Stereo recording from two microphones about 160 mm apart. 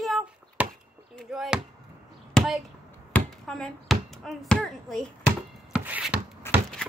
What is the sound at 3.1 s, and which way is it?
Speech, 5° left (ahead or behind).